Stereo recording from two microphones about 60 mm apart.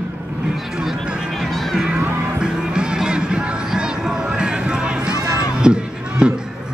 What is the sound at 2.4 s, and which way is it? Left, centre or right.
Music, centre.